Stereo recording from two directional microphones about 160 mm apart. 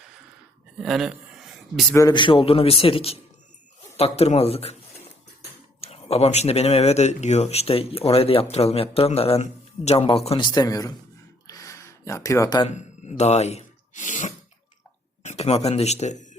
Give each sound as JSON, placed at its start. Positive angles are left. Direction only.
{"t": 0.8, "sound": "speech", "side_deg": 0}
{"t": 2.0, "sound": "speech", "side_deg": 25}
{"t": 5.8, "sound": "speech", "side_deg": 40}
{"t": 11.4, "sound": "a sound", "side_deg": 20}
{"t": 12.6, "sound": "speech", "side_deg": 45}